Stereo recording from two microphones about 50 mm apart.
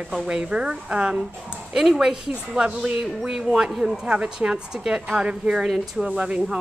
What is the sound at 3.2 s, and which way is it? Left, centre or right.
Speech, centre.